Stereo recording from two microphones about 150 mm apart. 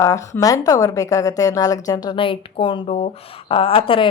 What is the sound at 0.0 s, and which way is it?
A woman's voice, 20° left (ahead or behind).